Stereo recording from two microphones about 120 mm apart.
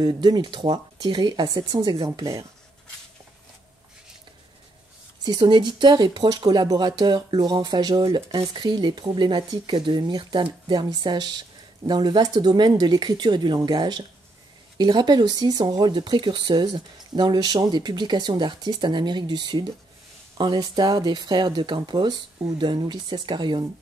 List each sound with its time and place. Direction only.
0.0 s speech: 35° right (ahead or behind)
5.2 s speech: 35° right (ahead or behind)